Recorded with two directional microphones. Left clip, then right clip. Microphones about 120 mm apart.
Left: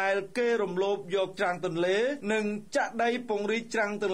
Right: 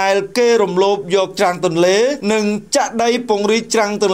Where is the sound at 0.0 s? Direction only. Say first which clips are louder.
Right 13 dB; 35° right (ahead or behind).